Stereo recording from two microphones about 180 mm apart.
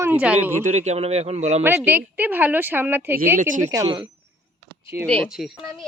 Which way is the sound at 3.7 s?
25° right (ahead or behind).